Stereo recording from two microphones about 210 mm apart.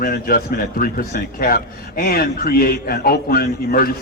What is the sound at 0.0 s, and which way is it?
A man's voice, 45° left (ahead or behind).